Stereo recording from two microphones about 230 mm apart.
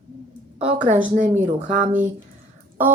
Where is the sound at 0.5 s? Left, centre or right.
Right.